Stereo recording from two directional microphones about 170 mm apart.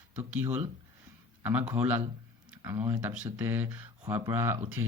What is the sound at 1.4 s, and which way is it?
Speech, 10° right (ahead or behind).